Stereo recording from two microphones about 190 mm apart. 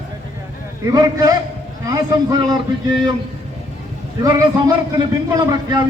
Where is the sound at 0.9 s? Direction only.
20° right (ahead or behind).